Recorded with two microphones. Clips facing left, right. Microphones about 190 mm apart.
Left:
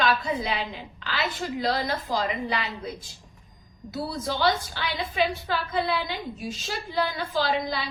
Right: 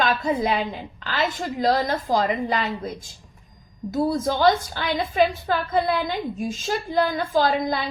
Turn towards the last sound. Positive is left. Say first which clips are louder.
# right 5 dB
turn(degrees=-50)  # may be behind; listen again after turning